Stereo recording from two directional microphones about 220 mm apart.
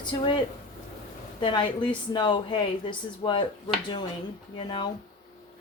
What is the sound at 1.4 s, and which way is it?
Speech, 20° left (ahead or behind).